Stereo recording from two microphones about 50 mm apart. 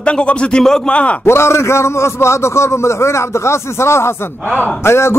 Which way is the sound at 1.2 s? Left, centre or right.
Left.